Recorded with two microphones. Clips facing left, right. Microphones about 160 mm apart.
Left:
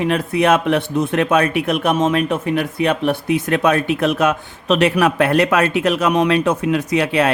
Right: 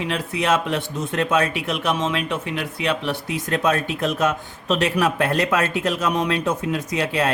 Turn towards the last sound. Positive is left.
turn(degrees=65)  # may be behind; listen again after turning